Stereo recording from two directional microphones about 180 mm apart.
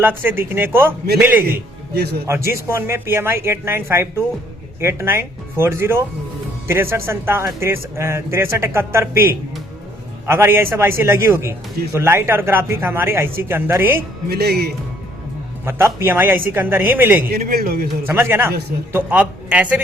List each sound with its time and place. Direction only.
0.2 s speech: 10° right (ahead or behind)
1.5 s a man's voice: 60° right (ahead or behind)
2.2 s speech: 15° right (ahead or behind)
14.3 s a man's voice: 60° right (ahead or behind)
15.6 s speech: 15° right (ahead or behind)
17.2 s a man's voice: 55° right (ahead or behind)
18.0 s speech: 10° right (ahead or behind)